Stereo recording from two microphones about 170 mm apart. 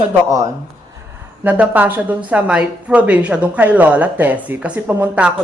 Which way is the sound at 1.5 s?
10° right (ahead or behind).